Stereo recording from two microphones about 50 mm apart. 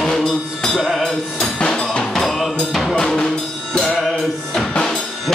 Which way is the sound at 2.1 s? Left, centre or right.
Centre.